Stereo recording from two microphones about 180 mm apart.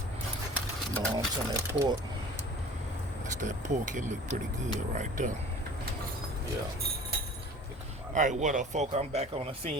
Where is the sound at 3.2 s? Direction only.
45° right (ahead or behind).